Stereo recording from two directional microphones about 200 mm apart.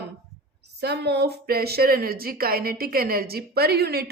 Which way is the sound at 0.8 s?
55° right (ahead or behind).